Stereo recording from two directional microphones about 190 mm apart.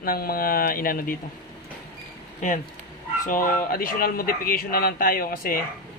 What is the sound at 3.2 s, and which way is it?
Speech, 45° left (ahead or behind).